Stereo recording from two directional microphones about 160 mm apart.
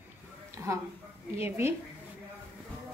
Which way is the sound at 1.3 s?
15° right (ahead or behind).